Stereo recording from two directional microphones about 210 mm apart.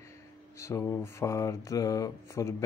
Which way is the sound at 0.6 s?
15° left (ahead or behind).